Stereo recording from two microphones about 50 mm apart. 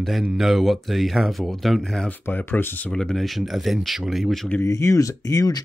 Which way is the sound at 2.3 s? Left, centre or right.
Left.